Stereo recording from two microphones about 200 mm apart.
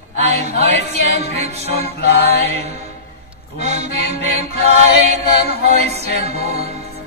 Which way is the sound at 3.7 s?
35° right (ahead or behind).